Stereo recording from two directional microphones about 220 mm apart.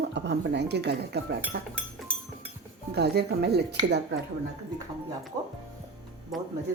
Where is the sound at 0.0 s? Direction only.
50° right (ahead or behind).